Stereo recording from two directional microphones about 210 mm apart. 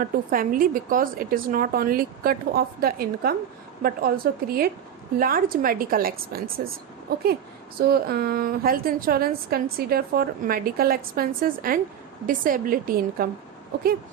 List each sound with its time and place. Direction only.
0.0 s a woman's voice: 40° right (ahead or behind)